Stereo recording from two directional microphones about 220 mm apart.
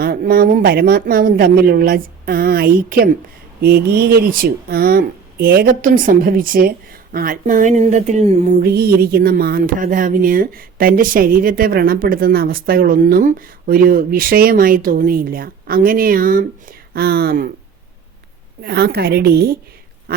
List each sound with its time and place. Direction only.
0.0 s a woman's voice: 45° right (ahead or behind)
7.1 s a sound: 40° right (ahead or behind)
18.6 s a woman's voice: 45° right (ahead or behind)
20.1 s duck: 45° right (ahead or behind)